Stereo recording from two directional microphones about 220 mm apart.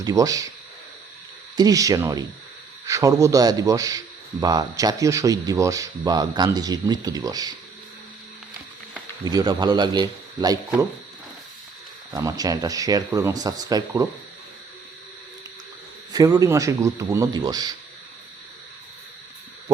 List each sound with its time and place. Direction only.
0.0 s a man's voice: 15° right (ahead or behind)
1.5 s a man's voice: 15° right (ahead or behind)
9.2 s a man's voice: 20° right (ahead or behind)
12.1 s a man's voice: 15° right (ahead or behind)
16.1 s a man's voice: 15° right (ahead or behind)